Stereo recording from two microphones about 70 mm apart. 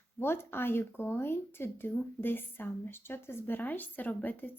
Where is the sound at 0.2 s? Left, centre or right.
Left.